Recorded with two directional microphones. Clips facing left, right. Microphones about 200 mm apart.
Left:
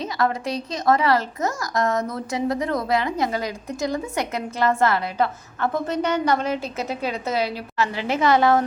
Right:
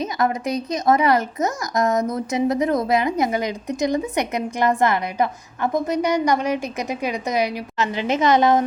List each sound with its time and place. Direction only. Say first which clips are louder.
0.0 s speech: right 2 dB; 20° right (ahead or behind)